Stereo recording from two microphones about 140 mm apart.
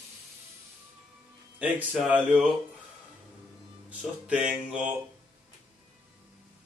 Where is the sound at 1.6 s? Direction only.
10° right (ahead or behind).